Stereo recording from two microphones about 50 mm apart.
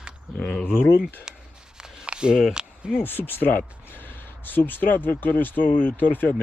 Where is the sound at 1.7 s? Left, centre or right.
Centre.